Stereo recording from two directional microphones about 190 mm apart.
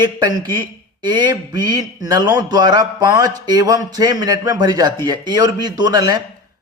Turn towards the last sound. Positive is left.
turn(degrees=-20)  # may be behind; listen again after turning